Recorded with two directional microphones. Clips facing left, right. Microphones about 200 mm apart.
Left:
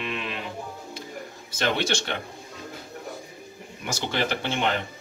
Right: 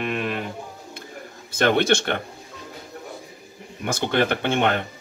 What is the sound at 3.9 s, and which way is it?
Speech, 55° right (ahead or behind).